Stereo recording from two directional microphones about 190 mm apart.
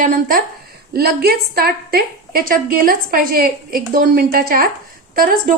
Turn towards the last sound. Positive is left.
turn(degrees=-50)  # may be behind; listen again after turning